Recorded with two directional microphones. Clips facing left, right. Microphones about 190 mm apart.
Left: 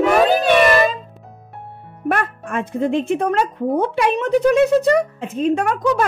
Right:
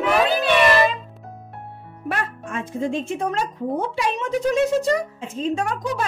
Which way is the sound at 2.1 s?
55° left (ahead or behind).